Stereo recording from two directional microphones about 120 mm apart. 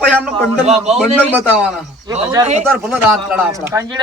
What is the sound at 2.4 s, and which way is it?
Speech, 35° right (ahead or behind).